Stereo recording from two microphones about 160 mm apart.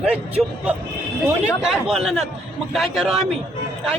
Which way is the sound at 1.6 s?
5° right (ahead or behind).